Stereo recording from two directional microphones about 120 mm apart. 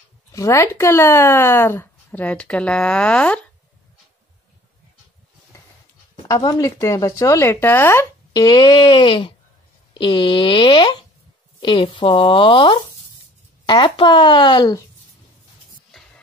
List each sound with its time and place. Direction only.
0.3 s speech: 25° left (ahead or behind); by 3.3 s 10° left (ahead or behind)
6.2 s speech: 30° left (ahead or behind)